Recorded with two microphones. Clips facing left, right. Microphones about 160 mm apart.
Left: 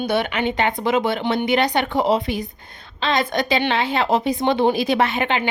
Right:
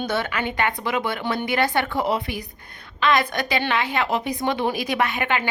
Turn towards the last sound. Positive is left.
turn(degrees=25)  # may be behind; listen again after turning